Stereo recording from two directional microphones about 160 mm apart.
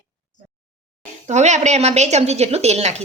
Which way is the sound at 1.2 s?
45° right (ahead or behind).